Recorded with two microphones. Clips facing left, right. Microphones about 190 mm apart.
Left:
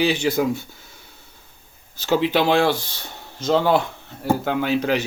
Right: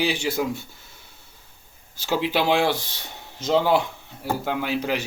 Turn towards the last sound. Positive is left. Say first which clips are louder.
# left 5 dB
turn(degrees=-10)  # may be behind; listen again after turning